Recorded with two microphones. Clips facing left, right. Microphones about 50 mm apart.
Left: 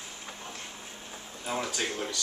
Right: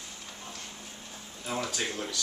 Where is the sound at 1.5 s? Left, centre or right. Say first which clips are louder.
Left 1 dB; centre.